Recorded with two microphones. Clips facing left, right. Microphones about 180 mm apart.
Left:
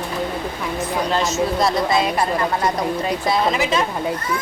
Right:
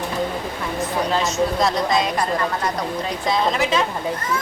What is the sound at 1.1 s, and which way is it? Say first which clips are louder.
Speech: left 1 dB; centre (ahead or behind).